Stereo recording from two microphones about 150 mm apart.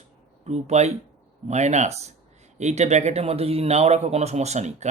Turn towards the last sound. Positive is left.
turn(degrees=-50)  # may be behind; listen again after turning